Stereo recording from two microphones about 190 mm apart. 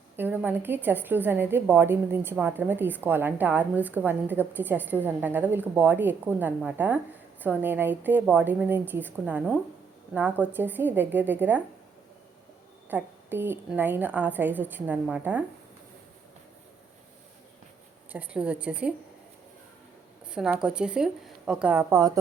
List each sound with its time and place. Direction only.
0.2 s a woman's voice: 10° right (ahead or behind)
12.9 s a woman's voice: 10° right (ahead or behind)
18.1 s a woman's voice: 10° right (ahead or behind)
20.3 s a woman's voice: 5° right (ahead or behind)